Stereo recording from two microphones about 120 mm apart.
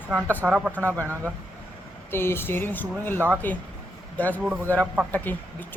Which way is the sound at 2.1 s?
20° left (ahead or behind).